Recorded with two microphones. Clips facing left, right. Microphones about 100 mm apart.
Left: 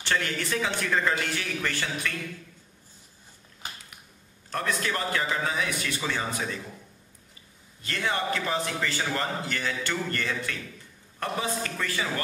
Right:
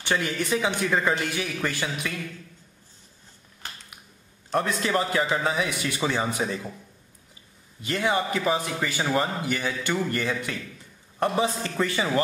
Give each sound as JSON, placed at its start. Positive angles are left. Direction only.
{"t": 0.0, "sound": "a man's voice", "side_deg": -15}
{"t": 4.5, "sound": "a man's voice", "side_deg": -20}
{"t": 7.8, "sound": "a man's voice", "side_deg": -15}